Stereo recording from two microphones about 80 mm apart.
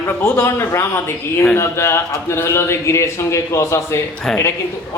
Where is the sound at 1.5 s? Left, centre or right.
Left.